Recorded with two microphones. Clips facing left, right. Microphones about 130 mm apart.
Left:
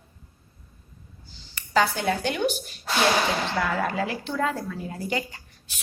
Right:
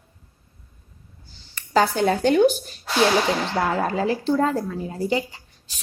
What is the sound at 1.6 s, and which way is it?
A woman's voice, 40° right (ahead or behind).